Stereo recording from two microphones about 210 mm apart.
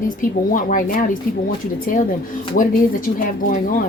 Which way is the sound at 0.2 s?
40° left (ahead or behind).